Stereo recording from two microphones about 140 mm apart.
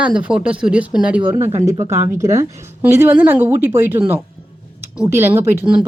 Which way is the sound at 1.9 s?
25° right (ahead or behind).